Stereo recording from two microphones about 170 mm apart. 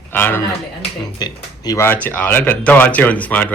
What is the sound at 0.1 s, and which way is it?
Speech, 10° left (ahead or behind).